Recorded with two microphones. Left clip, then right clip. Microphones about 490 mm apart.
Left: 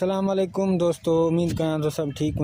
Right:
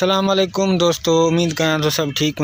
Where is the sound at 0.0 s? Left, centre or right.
Left.